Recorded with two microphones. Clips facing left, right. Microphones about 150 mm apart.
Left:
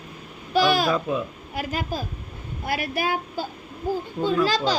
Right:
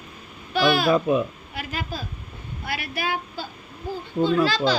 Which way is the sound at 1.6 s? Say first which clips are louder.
Left 4 dB; 45° left (ahead or behind).